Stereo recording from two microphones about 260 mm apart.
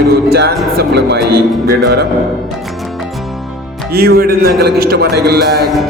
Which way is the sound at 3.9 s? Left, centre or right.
Right.